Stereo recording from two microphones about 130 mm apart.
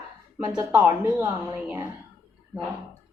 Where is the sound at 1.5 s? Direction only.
15° right (ahead or behind).